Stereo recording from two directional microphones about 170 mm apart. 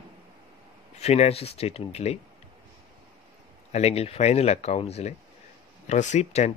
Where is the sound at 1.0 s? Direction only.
40° left (ahead or behind).